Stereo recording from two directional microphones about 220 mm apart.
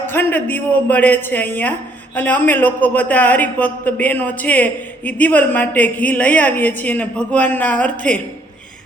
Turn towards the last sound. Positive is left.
turn(degrees=5)  # may be behind; listen again after turning